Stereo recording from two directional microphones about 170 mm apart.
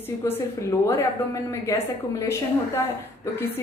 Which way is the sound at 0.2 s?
15° left (ahead or behind).